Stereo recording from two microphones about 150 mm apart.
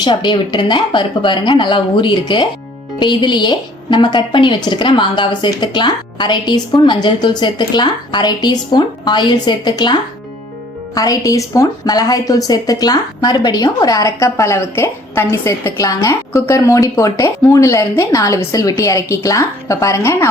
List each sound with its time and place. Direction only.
0.0 s a woman's voice: 30° left (ahead or behind)